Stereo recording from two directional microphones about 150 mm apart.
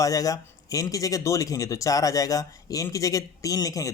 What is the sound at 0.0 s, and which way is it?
Speech, 25° left (ahead or behind).